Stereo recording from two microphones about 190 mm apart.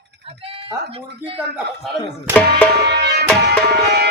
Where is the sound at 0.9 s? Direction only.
30° right (ahead or behind).